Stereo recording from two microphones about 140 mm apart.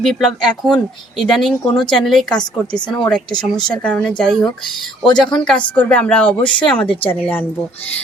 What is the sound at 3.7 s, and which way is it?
Speech, 5° left (ahead or behind).